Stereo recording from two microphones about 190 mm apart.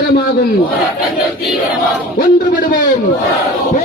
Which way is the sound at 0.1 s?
55° left (ahead or behind).